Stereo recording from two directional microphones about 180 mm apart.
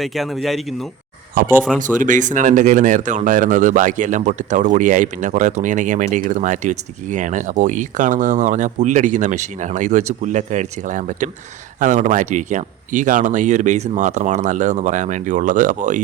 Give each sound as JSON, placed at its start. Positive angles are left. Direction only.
{"t": 0.0, "sound": "speech", "side_deg": 0}
{"t": 1.8, "sound": "speech", "side_deg": -45}